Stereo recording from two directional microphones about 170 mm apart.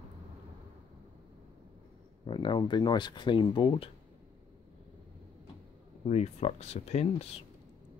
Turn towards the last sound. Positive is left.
turn(degrees=35)  # may be behind; listen again after turning